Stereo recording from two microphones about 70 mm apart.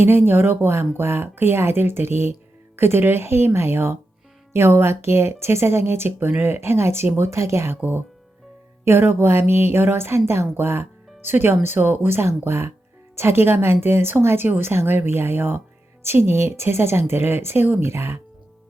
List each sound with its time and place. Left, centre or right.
0.0 s a woman's voice: right
7.8 s a woman's voice: right